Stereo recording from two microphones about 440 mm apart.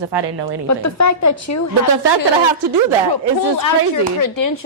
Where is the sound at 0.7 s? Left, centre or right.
Left.